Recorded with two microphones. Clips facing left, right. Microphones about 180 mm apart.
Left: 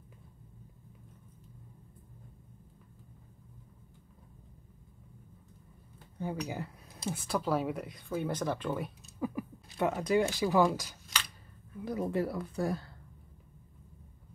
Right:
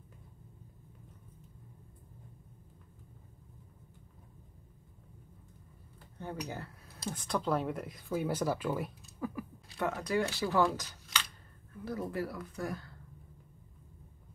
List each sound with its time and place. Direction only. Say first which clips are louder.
6.1 s speech: left 4 dB; 10° left (ahead or behind)
9.2 s speech: left 3 dB; 15° left (ahead or behind)